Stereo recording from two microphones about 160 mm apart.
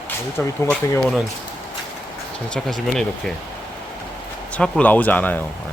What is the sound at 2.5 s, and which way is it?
Speech, centre (ahead or behind).